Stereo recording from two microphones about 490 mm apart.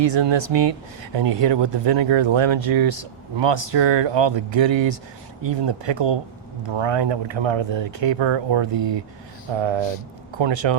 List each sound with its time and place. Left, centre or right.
0.1 s speech: right
6.7 s speech: right
10.3 s speech: right